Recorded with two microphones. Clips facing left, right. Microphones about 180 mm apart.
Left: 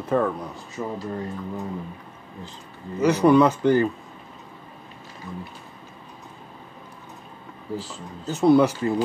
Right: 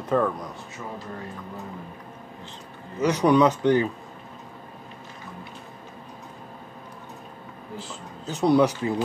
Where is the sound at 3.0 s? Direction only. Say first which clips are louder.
Left 2 dB; centre (ahead or behind).